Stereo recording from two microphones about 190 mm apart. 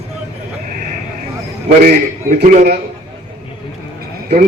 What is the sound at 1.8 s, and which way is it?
Speech, 45° right (ahead or behind).